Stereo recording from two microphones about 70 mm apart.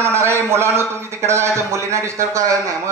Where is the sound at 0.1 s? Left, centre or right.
Right.